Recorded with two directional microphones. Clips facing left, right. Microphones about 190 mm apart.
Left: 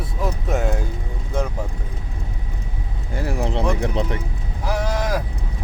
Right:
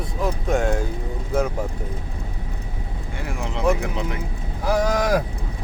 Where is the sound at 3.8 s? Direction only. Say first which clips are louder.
Left 4 dB; 35° left (ahead or behind).